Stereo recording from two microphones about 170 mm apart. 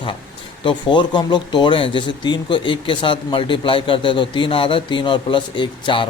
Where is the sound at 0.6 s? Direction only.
25° left (ahead or behind).